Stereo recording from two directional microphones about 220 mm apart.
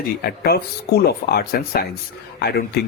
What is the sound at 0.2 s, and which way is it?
A man's voice, 45° left (ahead or behind).